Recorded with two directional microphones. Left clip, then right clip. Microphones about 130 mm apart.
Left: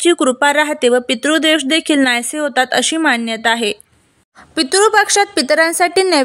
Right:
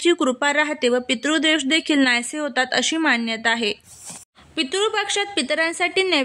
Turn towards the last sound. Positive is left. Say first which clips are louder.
# left 7 dB
turn(degrees=65)  # may be behind; listen again after turning